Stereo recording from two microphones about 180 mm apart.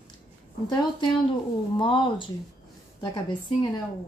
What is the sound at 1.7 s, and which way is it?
Speech, 25° left (ahead or behind).